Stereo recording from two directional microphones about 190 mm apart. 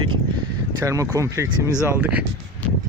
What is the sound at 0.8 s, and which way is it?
Speech, 15° right (ahead or behind).